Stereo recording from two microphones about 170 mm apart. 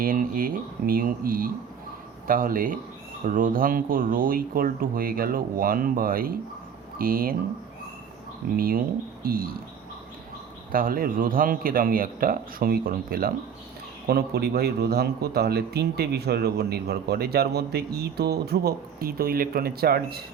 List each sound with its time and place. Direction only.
0.0 s speech: 55° right (ahead or behind)
8.5 s speech: 60° right (ahead or behind)
10.7 s speech: 55° right (ahead or behind)